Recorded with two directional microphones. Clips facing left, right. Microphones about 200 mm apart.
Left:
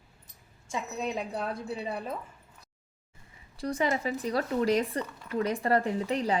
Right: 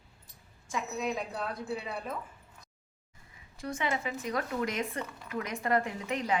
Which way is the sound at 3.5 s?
35° left (ahead or behind).